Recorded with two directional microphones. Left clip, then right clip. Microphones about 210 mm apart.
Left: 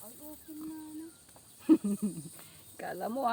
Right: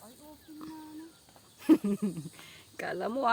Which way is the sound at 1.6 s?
45° right (ahead or behind).